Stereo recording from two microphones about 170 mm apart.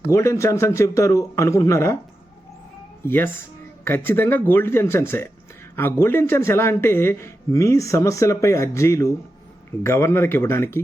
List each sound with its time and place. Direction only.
0.1 s speech: 15° left (ahead or behind)
3.0 s speech: 10° left (ahead or behind)